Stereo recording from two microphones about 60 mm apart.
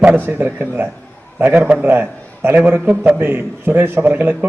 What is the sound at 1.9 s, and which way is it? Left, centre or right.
A man's voice, right.